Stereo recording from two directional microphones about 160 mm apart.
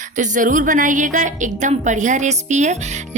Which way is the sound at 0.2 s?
55° right (ahead or behind).